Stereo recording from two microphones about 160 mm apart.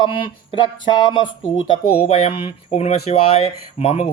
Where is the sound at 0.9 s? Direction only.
30° left (ahead or behind).